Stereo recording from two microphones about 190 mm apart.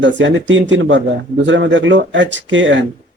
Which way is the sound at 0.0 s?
75° right (ahead or behind).